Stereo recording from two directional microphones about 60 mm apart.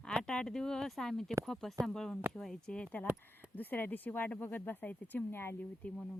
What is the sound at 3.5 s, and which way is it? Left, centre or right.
Speech, left.